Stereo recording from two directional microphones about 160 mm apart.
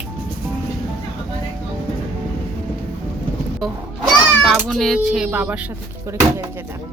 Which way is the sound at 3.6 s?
Centre (ahead or behind).